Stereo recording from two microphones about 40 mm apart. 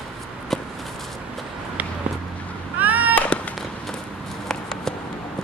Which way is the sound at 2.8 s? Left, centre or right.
Right.